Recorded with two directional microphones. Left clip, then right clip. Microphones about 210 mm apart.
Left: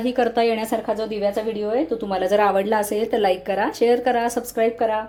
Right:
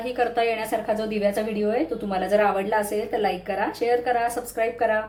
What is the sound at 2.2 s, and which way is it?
Speech, 35° left (ahead or behind).